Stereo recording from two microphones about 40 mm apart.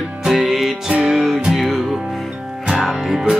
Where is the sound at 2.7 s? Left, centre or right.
Centre.